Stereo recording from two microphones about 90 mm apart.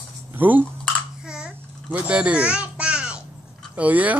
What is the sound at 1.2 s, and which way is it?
Babbling, 10° right (ahead or behind).